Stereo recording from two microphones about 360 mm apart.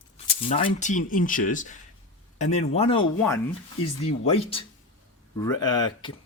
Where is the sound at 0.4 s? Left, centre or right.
Centre.